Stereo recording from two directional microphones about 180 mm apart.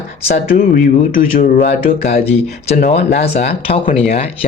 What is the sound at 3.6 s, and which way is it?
Speech, 30° left (ahead or behind).